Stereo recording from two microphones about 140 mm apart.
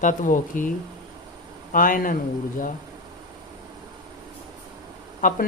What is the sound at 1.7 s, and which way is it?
Speech, 80° left.